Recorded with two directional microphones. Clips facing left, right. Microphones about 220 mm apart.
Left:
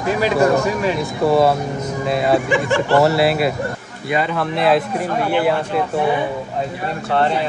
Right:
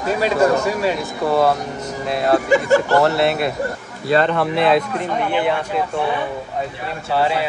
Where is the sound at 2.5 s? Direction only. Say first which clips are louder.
Right 2 dB; 40° right (ahead or behind).